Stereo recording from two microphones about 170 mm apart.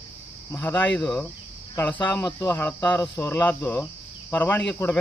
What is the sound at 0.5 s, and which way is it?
Speech, 15° left (ahead or behind).